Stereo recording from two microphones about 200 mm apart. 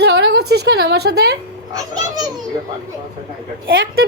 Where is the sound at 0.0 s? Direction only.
55° right (ahead or behind).